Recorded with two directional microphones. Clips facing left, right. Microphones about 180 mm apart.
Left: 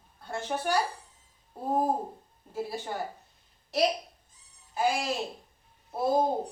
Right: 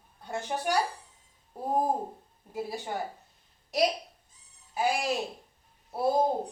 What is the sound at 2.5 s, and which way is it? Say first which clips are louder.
Speech: left 1 dB; 15° right (ahead or behind).